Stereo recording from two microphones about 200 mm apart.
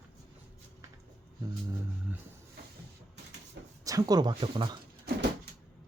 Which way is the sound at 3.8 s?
15° right (ahead or behind).